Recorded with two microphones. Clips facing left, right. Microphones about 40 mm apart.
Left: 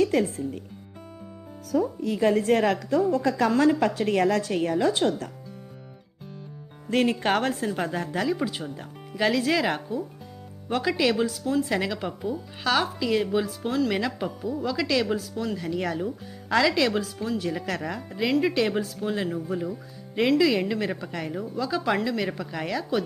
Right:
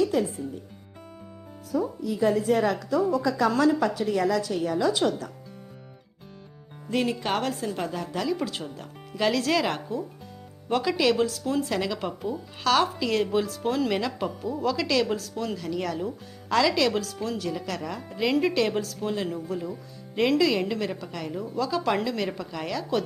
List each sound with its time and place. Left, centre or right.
0.0 s speech: left
1.7 s a woman's voice: left
3.0 s a woman's voice: left
3.9 s a woman's voice: left
6.9 s a woman's voice: left
8.1 s speech: centre
15.5 s speech: centre
17.9 s speech: centre; by 21.3 s left
21.4 s speech: centre